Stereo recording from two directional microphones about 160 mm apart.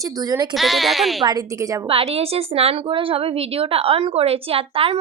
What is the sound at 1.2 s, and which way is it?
Speech, 20° right (ahead or behind).